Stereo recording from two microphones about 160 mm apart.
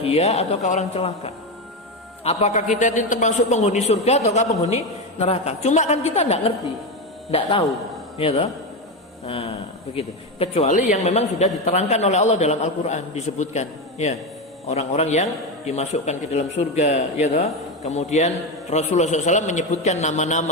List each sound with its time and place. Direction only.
0.0 s a man's voice: 40° left (ahead or behind)